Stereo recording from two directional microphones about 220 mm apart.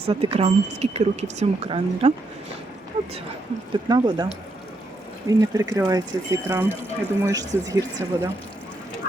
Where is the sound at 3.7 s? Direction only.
20° right (ahead or behind).